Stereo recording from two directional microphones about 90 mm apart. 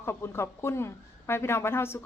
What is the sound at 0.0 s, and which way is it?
A woman's voice, 25° left (ahead or behind).